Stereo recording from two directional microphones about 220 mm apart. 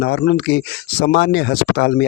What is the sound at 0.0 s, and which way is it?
Speech, 50° left (ahead or behind).